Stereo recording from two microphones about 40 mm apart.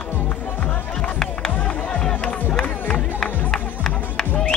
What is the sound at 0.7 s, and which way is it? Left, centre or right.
Music, left.